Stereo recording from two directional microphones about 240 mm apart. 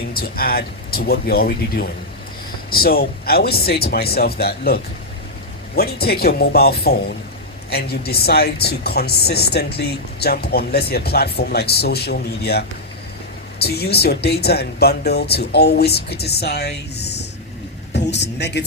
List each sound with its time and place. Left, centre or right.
0.1 s speech: left